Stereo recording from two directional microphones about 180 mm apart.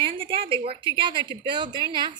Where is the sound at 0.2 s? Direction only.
30° right (ahead or behind).